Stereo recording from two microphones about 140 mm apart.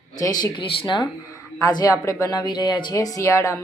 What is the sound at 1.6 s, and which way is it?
A woman's voice, 25° left (ahead or behind).